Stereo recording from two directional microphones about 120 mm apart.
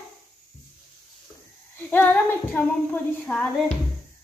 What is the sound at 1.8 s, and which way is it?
A woman's voice, 15° left (ahead or behind).